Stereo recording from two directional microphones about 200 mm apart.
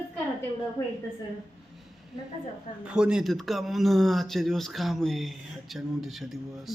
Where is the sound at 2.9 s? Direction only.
5° right (ahead or behind).